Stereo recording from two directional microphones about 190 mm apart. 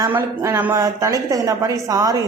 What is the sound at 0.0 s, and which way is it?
A woman's voice, 15° right (ahead or behind).